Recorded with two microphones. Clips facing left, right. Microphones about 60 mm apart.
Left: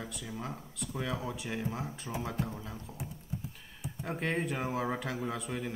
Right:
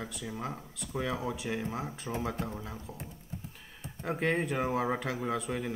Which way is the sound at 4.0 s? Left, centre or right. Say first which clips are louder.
Right 3 dB; centre.